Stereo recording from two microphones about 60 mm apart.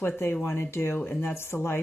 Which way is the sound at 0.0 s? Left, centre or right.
Left.